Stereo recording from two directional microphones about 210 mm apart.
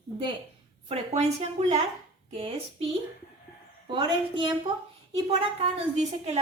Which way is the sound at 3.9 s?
20° right (ahead or behind).